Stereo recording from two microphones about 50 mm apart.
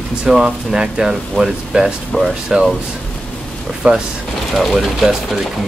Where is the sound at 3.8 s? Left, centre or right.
Right.